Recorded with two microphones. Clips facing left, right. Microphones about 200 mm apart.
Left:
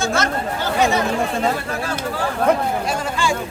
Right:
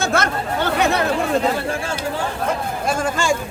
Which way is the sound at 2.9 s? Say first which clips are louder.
Right 2 dB; 45° right (ahead or behind).